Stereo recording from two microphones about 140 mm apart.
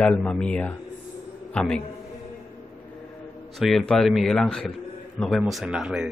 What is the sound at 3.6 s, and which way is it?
Speech, centre (ahead or behind).